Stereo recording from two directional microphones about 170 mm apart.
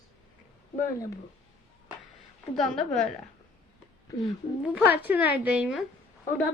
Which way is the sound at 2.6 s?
Centre (ahead or behind).